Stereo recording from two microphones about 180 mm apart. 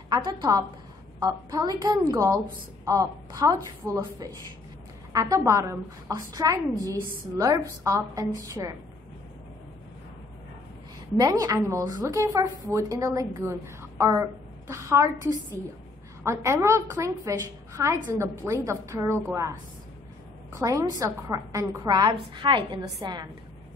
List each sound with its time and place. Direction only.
0.1 s a woman's voice: 25° right (ahead or behind)
11.1 s a woman's voice: 20° right (ahead or behind)
20.5 s a woman's voice: 15° right (ahead or behind)